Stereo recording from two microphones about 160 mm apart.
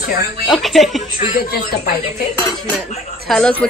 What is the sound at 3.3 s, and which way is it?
Speech, 5° left (ahead or behind).